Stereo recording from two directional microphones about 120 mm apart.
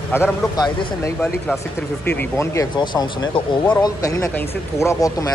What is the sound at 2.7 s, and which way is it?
Speech, 40° left (ahead or behind).